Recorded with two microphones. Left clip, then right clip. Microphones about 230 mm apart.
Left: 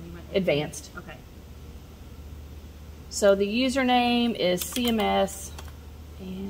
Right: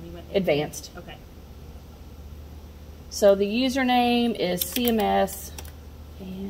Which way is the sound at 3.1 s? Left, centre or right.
Centre.